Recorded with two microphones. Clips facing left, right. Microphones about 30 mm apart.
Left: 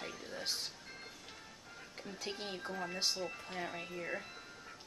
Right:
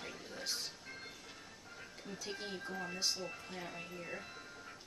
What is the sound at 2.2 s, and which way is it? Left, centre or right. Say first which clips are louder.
Speech: left 2 dB; left.